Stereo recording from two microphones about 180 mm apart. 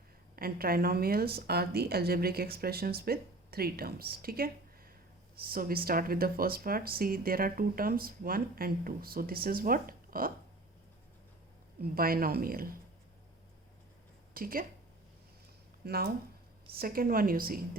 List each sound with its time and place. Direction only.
0.3 s a woman's voice: 55° right (ahead or behind)
11.8 s speech: 55° right (ahead or behind)
14.3 s speech: 50° right (ahead or behind)
15.8 s speech: 60° right (ahead or behind)